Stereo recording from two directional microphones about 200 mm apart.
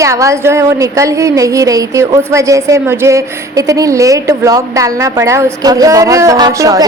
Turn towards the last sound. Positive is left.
turn(degrees=-20)  # may be behind; listen again after turning